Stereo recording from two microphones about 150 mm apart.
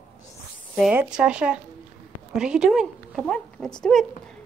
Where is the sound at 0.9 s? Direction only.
5° right (ahead or behind).